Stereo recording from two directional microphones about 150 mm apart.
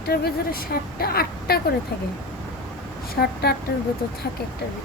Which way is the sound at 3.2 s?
90° left.